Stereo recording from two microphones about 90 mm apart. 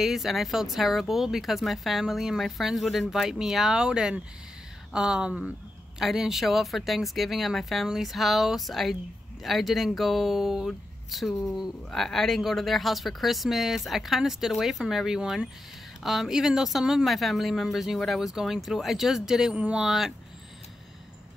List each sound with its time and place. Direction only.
0.0 s speech: 5° right (ahead or behind)